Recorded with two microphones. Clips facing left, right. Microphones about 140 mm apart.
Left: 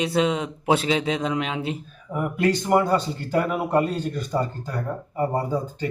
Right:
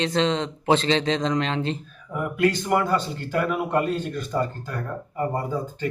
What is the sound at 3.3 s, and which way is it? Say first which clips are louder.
A man's voice: left 2 dB; 30° left (ahead or behind).